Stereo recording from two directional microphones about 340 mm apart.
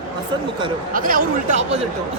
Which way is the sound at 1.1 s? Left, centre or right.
Right.